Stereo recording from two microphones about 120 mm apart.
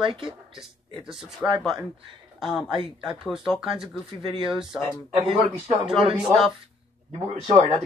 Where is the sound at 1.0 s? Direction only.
5° right (ahead or behind).